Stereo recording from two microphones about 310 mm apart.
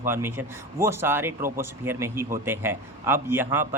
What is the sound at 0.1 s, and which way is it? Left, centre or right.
A man's voice, centre.